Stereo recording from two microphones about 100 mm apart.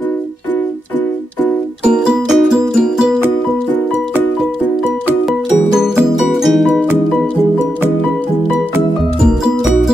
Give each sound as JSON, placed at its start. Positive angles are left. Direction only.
{"t": 1.9, "sound": "music", "side_deg": -5}
{"t": 6.1, "sound": "music", "side_deg": 0}
{"t": 9.2, "sound": "music", "side_deg": -5}